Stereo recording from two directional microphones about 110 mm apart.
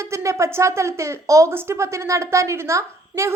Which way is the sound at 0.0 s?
25° right (ahead or behind).